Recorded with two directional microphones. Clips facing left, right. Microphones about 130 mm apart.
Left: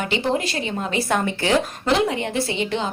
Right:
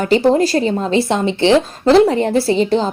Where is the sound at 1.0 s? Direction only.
25° right (ahead or behind).